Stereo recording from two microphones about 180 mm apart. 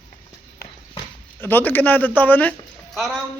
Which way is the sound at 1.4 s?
10° left (ahead or behind).